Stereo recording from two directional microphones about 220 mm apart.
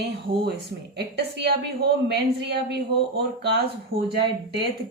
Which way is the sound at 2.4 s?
50° right (ahead or behind).